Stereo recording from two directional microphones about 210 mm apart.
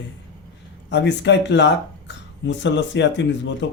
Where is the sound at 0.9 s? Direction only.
55° left (ahead or behind).